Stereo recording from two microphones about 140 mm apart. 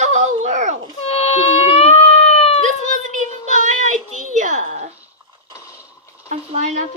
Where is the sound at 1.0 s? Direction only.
45° left (ahead or behind).